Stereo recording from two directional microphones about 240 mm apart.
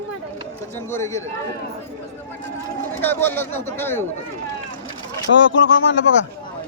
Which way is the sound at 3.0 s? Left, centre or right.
Centre.